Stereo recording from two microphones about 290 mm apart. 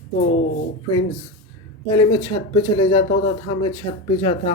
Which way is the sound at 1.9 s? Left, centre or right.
Centre.